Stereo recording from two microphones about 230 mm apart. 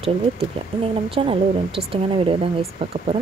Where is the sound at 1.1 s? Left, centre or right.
Right.